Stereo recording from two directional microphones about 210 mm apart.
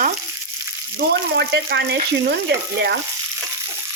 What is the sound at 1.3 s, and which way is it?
A man's voice, 50° right (ahead or behind).